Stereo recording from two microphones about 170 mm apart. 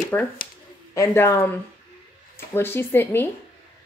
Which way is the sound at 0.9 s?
15° left (ahead or behind).